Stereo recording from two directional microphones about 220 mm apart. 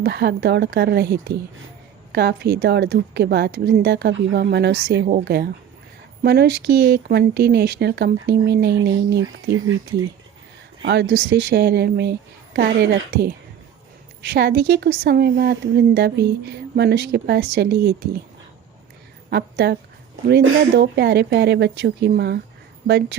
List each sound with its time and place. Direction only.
0.0 s a woman's voice: 45° right (ahead or behind)
10.8 s a woman's voice: 50° right (ahead or behind)
19.3 s a woman's voice: 45° right (ahead or behind)